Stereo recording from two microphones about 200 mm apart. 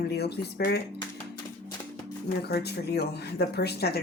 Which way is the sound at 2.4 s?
55° left (ahead or behind).